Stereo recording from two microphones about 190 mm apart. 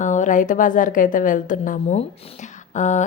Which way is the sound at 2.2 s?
40° left (ahead or behind).